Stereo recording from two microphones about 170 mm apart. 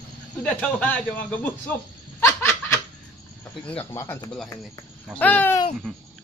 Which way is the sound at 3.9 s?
15° left (ahead or behind).